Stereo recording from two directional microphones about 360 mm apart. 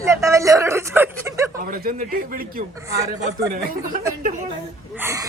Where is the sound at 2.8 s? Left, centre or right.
Centre.